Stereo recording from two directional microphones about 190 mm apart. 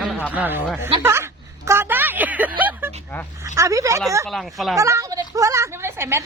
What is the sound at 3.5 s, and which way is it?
Speech, 15° right (ahead or behind).